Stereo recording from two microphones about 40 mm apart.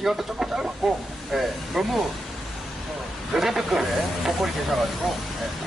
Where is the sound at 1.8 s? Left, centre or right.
Centre.